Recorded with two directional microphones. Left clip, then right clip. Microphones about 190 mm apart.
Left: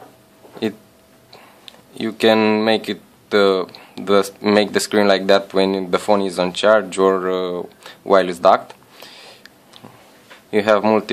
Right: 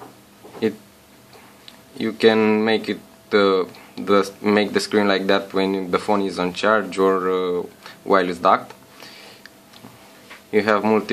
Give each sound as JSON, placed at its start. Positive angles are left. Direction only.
{"t": 1.7, "sound": "speech", "side_deg": 40}
{"t": 10.5, "sound": "speech", "side_deg": 35}